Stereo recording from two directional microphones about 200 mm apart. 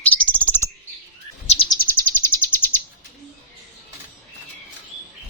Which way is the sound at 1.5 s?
25° left (ahead or behind).